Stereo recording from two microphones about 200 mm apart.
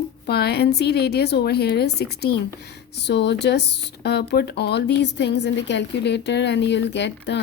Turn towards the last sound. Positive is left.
turn(degrees=60)  # may be behind; listen again after turning